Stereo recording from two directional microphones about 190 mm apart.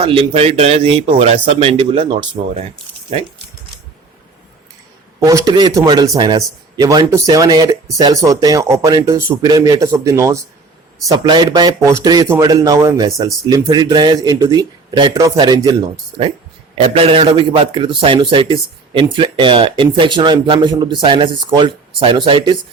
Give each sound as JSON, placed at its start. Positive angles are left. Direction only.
{"t": 0.0, "sound": "speech", "side_deg": -30}
{"t": 5.2, "sound": "a man's voice", "side_deg": -20}
{"t": 16.7, "sound": "a man's voice", "side_deg": -30}